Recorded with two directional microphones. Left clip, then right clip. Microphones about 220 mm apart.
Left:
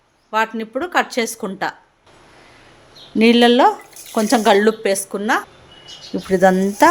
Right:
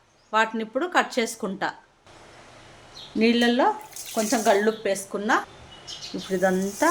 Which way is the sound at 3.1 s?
40° left (ahead or behind).